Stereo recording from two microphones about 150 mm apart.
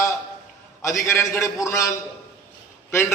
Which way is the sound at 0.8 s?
20° left (ahead or behind).